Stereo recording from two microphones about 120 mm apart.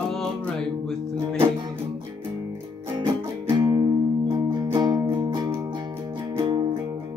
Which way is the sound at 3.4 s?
40° right (ahead or behind).